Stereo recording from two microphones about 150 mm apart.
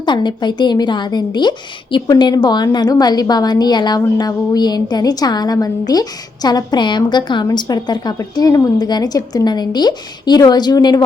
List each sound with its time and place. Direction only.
0.0 s a woman's voice: 30° left (ahead or behind)